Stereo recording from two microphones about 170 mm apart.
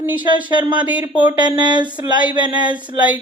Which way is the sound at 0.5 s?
25° right (ahead or behind).